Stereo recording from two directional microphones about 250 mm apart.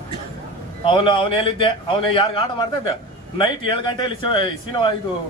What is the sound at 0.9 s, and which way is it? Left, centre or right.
A man's voice, centre.